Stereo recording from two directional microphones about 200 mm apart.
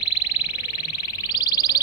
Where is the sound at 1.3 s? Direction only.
20° left (ahead or behind).